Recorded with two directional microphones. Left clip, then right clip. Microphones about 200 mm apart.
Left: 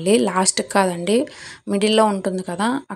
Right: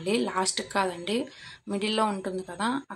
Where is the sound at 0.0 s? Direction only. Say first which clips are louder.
Left 10 dB; 35° left (ahead or behind).